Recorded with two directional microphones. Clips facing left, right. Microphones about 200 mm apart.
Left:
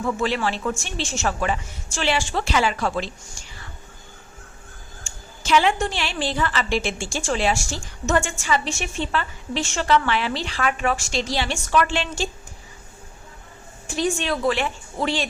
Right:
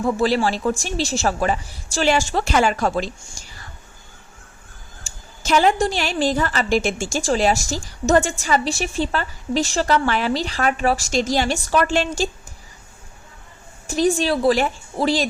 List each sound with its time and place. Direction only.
0.0 s a woman's voice: 35° right (ahead or behind)
5.0 s a woman's voice: 40° right (ahead or behind)
13.8 s a woman's voice: 40° right (ahead or behind)